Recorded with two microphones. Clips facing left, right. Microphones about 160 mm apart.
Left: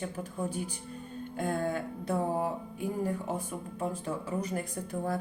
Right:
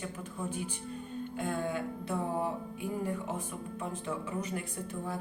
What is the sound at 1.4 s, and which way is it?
Music, 45° left (ahead or behind).